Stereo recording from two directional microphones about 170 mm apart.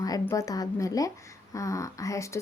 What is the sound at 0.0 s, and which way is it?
A woman's voice, 20° left (ahead or behind).